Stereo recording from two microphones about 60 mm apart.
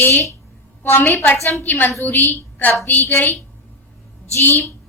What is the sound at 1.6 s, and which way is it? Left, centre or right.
A woman's voice, left.